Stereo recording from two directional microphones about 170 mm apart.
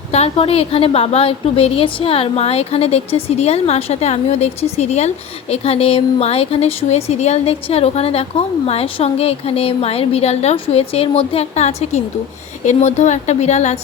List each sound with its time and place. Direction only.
0.1 s a woman's voice: 35° left (ahead or behind)